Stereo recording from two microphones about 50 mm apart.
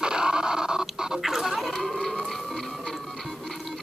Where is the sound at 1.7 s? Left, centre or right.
Centre.